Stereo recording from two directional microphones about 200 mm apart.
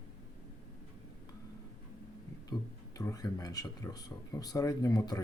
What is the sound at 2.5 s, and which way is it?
Speech, 20° left (ahead or behind).